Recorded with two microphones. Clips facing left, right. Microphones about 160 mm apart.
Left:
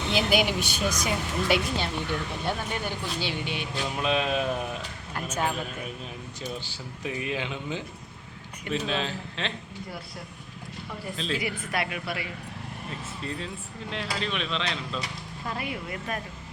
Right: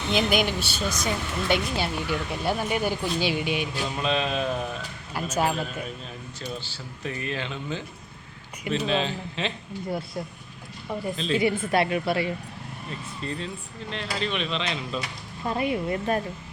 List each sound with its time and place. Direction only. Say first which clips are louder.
0.1 s speech: right 1 dB; 5° left (ahead or behind)
1.7 s speech: right 2 dB; 5° right (ahead or behind)
3.9 s speech: left 1 dB; 10° left (ahead or behind)
5.1 s speech: right 4 dB; 10° right (ahead or behind)
6.4 s speech: even; 15° left (ahead or behind)
8.7 s speech: right 3 dB; centre (ahead or behind)
11.3 s a woman's voice: right 11 dB; 25° right (ahead or behind)
13.2 s speech: right 3 dB; 5° left (ahead or behind)
15.4 s a woman's voice: right 8 dB; 25° right (ahead or behind)